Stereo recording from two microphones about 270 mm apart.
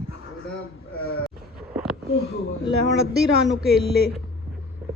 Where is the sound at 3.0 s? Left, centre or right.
Right.